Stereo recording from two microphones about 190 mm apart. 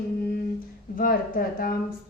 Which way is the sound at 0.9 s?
50° left (ahead or behind).